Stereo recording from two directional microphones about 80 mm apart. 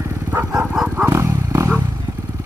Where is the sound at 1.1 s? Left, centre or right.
Right.